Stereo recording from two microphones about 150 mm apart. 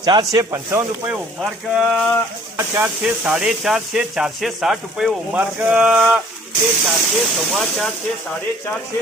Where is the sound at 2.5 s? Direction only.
15° right (ahead or behind).